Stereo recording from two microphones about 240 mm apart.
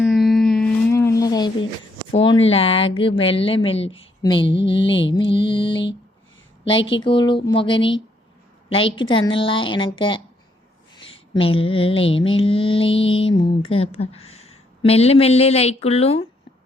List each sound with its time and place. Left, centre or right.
0.0 s a sound: centre
2.2 s speech: left
4.9 s mantra: left
5.1 s speech: left